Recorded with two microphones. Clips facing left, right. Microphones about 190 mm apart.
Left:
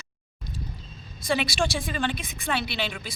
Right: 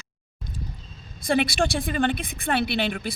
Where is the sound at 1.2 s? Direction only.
55° right (ahead or behind).